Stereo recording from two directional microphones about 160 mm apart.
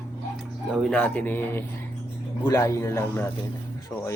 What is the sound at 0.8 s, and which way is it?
Speech, 5° left (ahead or behind).